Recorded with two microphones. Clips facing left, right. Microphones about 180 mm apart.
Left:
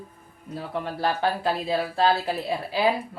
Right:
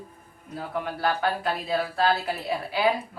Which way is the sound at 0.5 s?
30° left (ahead or behind).